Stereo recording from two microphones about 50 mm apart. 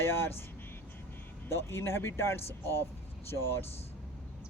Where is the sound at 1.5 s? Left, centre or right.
Left.